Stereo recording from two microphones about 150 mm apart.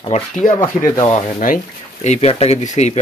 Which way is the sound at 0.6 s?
35° left (ahead or behind).